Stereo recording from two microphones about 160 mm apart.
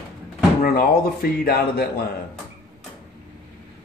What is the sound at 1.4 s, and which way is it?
Speech, 80° left.